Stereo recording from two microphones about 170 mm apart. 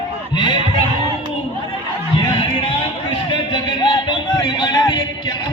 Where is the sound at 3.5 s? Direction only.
25° left (ahead or behind).